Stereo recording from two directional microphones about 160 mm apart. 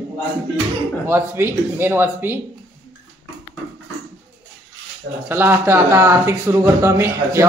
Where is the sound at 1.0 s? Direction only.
15° right (ahead or behind).